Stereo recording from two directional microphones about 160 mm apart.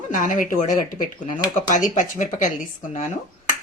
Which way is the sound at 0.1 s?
55° left (ahead or behind).